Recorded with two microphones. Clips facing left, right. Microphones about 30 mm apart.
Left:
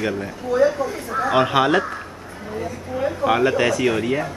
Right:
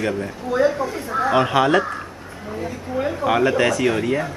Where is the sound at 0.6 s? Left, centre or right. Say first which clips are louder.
Even; centre.